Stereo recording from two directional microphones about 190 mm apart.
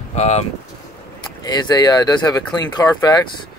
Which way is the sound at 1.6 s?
20° left (ahead or behind).